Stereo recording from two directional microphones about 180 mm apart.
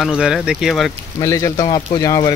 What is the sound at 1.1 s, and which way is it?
Speech, 20° left (ahead or behind).